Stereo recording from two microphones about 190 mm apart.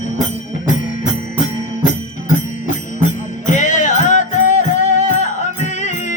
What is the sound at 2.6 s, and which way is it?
Music, 40° left (ahead or behind).